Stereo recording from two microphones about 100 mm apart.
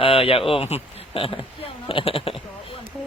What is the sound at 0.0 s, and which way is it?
Speech, 65° left (ahead or behind).